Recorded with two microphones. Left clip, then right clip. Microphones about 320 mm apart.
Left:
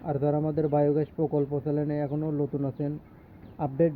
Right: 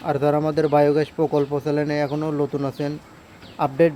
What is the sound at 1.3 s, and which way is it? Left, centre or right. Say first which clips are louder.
Speech: right 6 dB; centre.